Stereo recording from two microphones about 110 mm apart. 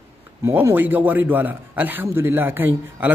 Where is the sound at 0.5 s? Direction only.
20° right (ahead or behind).